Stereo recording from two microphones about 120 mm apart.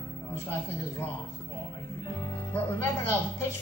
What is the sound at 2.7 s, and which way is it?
Speech, 25° left (ahead or behind).